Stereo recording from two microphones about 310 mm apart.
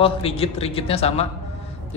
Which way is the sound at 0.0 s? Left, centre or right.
Centre.